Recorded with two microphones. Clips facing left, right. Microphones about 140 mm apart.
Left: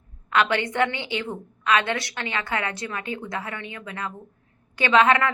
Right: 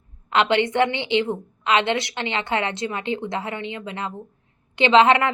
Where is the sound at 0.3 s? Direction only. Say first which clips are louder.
Right 3 dB; 25° right (ahead or behind).